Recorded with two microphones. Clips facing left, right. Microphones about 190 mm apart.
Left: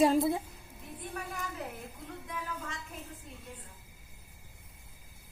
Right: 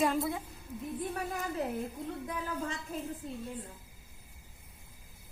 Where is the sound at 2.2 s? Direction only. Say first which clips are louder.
Right 2 dB; 35° right (ahead or behind).